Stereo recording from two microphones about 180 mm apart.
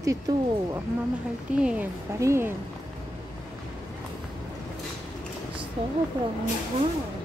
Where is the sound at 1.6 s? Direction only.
5° right (ahead or behind).